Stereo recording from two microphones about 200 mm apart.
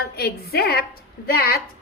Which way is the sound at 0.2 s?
50° left (ahead or behind).